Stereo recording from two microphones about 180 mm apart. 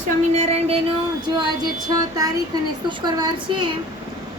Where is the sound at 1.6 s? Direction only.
20° right (ahead or behind).